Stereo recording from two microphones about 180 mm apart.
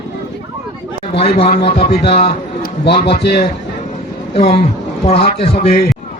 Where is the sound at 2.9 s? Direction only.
30° left (ahead or behind).